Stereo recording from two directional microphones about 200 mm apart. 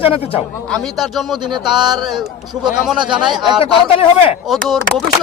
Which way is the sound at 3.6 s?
30° left (ahead or behind).